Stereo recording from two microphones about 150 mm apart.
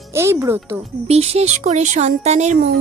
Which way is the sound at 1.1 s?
45° right (ahead or behind).